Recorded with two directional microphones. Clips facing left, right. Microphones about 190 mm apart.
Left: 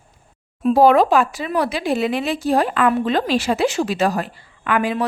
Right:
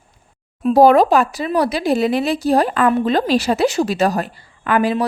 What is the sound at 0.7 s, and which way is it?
A woman's voice, 40° right (ahead or behind).